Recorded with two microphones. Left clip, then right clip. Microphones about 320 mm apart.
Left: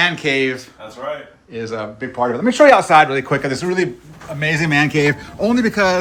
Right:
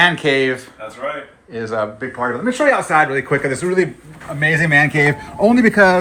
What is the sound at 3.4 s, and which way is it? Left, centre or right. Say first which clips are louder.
Speech: right 1 dB; left.